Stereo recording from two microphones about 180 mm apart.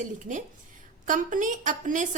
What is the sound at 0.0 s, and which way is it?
A woman's voice, 45° right (ahead or behind).